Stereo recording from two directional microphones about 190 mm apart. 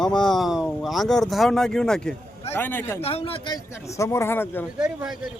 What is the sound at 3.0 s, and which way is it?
Speech, 30° left (ahead or behind).